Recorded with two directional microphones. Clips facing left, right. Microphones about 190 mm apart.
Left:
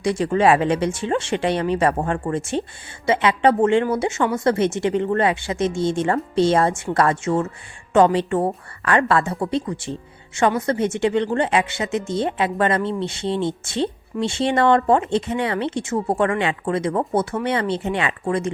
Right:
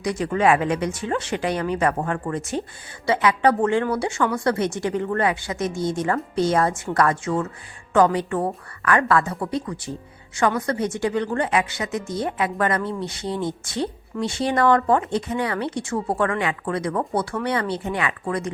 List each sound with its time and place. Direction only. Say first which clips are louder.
0.0 s a woman's voice: left 3 dB; 30° left (ahead or behind)